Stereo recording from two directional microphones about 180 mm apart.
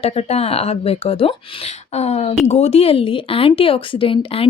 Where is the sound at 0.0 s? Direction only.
35° left (ahead or behind).